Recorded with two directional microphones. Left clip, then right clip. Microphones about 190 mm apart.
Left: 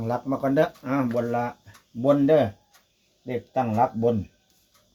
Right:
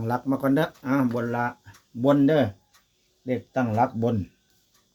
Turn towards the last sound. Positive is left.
turn(degrees=-50)  # may be behind; listen again after turning